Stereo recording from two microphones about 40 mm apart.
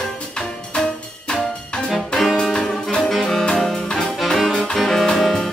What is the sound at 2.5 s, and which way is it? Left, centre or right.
Music, centre.